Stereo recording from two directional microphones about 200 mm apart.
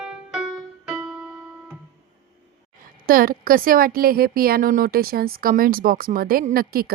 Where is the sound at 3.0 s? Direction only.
45° right (ahead or behind).